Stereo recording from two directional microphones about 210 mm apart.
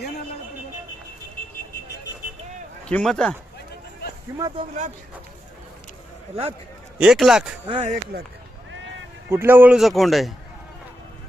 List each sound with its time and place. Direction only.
2.8 s a man's voice: 5° left (ahead or behind)
4.4 s speech: 15° right (ahead or behind)
7.0 s a man's voice: centre (ahead or behind)
7.7 s speech: 30° right (ahead or behind)
9.3 s a man's voice: 10° right (ahead or behind)